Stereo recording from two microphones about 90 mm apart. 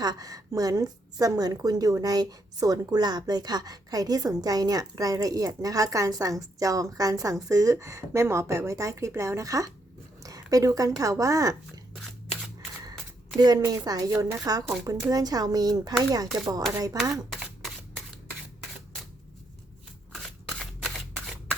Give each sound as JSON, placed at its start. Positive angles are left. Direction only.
{"t": 0.0, "sound": "a woman's voice", "side_deg": -45}
{"t": 13.4, "sound": "a woman's voice", "side_deg": -45}
{"t": 17.3, "sound": "camera", "side_deg": 0}
{"t": 20.1, "sound": "a sound", "side_deg": 5}